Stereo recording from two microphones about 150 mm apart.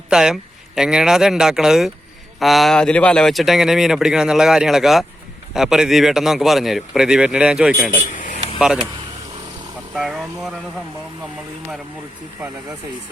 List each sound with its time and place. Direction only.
0.1 s speech: 5° right (ahead or behind)
7.9 s speech: 60° left (ahead or behind)
8.5 s speech: 5° right (ahead or behind)
9.9 s speech: centre (ahead or behind)